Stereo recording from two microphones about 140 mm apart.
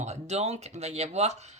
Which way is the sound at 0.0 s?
55° right (ahead or behind).